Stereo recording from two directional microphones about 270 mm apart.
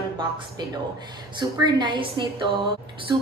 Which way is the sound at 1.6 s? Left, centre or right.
Centre.